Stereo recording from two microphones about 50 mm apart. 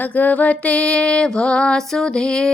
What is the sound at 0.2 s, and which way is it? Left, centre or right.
Music, left.